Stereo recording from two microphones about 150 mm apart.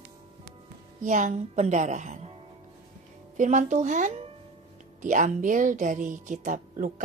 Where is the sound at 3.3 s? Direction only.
55° right (ahead or behind).